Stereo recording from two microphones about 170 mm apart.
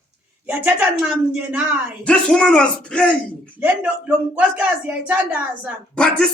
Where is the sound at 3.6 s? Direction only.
10° right (ahead or behind).